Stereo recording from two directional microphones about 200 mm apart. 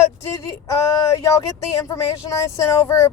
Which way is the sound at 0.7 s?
15° left (ahead or behind).